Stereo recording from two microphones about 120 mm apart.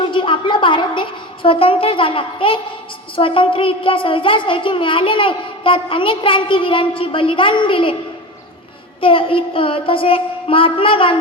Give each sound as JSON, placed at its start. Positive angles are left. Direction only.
{"t": 0.1, "sound": "a sound", "side_deg": 45}
{"t": 3.2, "sound": "a woman's voice", "side_deg": 45}
{"t": 9.0, "sound": "a woman's voice", "side_deg": 50}